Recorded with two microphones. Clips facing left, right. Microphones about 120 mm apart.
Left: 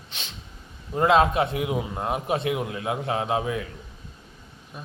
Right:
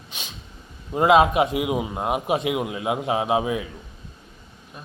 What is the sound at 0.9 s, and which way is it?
A man's voice, 15° right (ahead or behind).